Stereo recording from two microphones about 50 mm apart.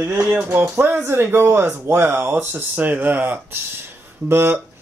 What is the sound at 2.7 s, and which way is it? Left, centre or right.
Speech, right.